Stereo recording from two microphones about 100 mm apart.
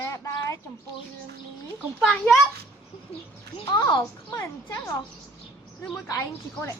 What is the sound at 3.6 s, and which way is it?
Speech, 45° left (ahead or behind).